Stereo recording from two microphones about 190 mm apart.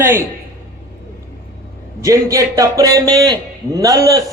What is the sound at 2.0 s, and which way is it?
A man's voice, 15° right (ahead or behind).